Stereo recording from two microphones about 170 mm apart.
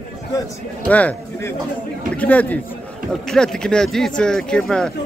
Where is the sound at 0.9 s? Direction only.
10° left (ahead or behind).